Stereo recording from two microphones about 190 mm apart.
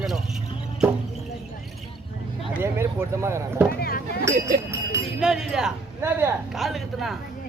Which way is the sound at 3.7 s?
50° left (ahead or behind).